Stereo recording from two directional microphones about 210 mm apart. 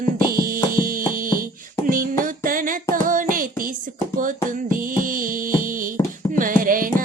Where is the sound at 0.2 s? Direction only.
45° right (ahead or behind).